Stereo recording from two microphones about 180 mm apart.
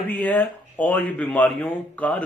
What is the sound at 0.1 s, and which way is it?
Speech, 10° left (ahead or behind).